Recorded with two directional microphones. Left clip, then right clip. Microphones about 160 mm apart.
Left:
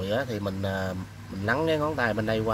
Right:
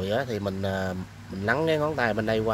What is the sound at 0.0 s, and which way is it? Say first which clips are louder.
Speech: right 1 dB; 50° right (ahead or behind).